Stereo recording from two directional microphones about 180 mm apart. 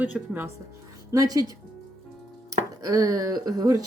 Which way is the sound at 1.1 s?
20° right (ahead or behind).